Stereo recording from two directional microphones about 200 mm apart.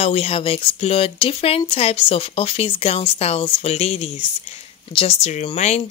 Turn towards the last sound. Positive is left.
turn(degrees=35)  # may be behind; listen again after turning